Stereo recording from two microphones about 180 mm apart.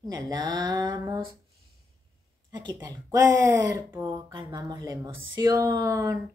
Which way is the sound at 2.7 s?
15° right (ahead or behind).